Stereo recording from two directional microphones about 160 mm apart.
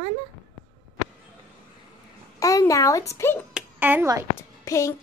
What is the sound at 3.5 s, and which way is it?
Speech, 10° right (ahead or behind).